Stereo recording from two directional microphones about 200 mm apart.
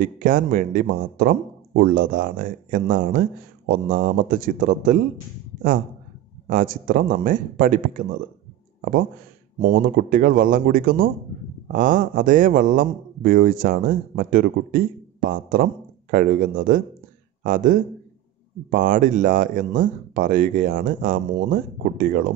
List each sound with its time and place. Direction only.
0.0 s a man's voice: 40° right (ahead or behind)
6.4 s a man's voice: 45° right (ahead or behind)
9.6 s a man's voice: 50° right (ahead or behind)